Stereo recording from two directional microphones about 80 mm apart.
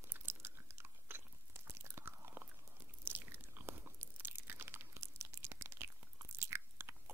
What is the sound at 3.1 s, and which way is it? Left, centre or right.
Crunch, right.